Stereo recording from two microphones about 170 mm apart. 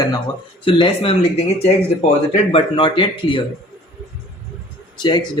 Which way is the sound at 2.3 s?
35° left (ahead or behind).